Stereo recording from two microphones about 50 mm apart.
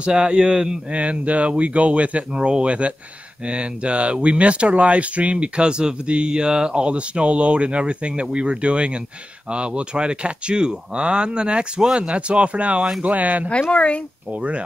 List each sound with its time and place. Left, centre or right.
0.0 s speech: right
13.6 s speech: left
14.3 s speech: right